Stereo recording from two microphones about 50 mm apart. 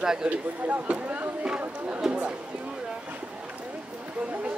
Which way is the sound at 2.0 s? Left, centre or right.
Centre.